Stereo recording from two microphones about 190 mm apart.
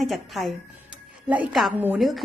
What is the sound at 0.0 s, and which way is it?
A woman's voice, centre (ahead or behind).